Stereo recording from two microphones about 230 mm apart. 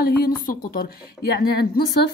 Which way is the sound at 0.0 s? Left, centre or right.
Left.